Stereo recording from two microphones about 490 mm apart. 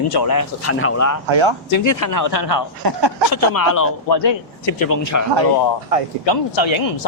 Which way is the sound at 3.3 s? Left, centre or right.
Left.